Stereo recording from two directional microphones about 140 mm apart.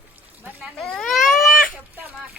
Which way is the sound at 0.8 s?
Centre (ahead or behind).